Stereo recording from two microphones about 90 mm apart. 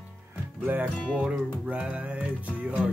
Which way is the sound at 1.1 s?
10° right (ahead or behind).